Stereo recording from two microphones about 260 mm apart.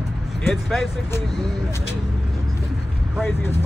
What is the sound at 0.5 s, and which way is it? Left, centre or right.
Speech, centre.